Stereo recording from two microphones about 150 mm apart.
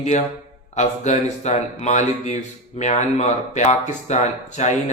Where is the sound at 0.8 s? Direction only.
50° left (ahead or behind).